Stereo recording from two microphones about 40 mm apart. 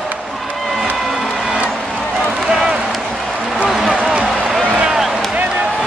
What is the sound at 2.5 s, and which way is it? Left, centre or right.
Run, centre.